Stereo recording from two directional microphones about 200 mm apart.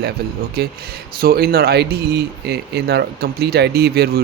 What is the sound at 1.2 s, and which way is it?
Speech, 50° right (ahead or behind).